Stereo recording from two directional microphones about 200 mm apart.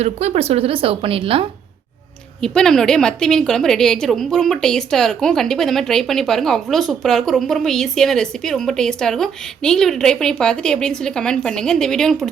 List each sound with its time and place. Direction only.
0.0 s a woman's voice: 30° right (ahead or behind)
2.4 s a woman's voice: 5° left (ahead or behind)